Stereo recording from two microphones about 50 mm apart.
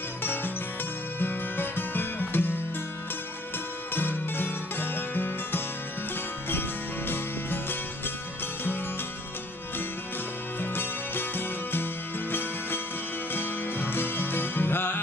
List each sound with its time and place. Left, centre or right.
0.2 s music: left
3.9 s music: left
7.1 s music: left
10.6 s music: left